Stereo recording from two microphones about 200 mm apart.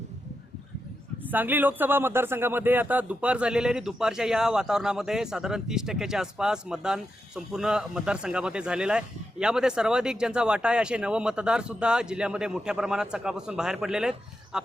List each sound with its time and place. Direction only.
1.3 s a man's voice: 10° right (ahead or behind)